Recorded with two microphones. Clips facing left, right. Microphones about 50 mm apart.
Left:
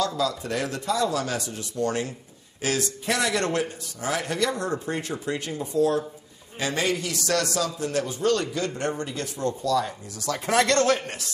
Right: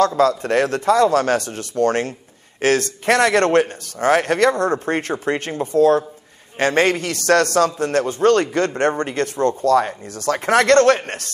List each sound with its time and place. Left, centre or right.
0.0 s a man's voice: right